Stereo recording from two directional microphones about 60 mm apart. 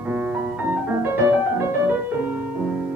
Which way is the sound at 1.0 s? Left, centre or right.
Right.